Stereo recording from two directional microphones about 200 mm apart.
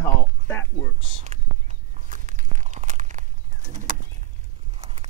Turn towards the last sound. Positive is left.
turn(degrees=-35)  # may be behind; listen again after turning